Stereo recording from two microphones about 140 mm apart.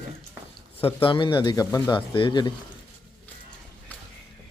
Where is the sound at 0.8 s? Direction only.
40° left (ahead or behind).